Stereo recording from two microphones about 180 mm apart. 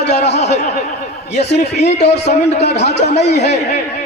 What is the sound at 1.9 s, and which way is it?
Speech, 35° left (ahead or behind).